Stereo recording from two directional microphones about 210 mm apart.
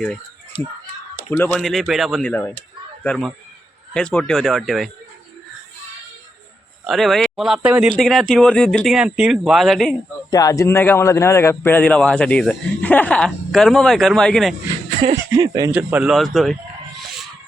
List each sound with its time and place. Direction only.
0.5 s speech: 25° left (ahead or behind)
1.3 s speech: 5° left (ahead or behind)
6.8 s speech: centre (ahead or behind)
10.3 s a man's voice: 15° left (ahead or behind)
15.1 s speech: 15° right (ahead or behind)